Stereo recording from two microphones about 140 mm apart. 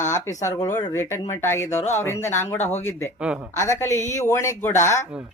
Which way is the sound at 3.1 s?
5° right (ahead or behind).